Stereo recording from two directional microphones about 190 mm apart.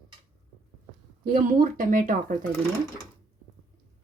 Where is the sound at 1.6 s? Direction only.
45° right (ahead or behind).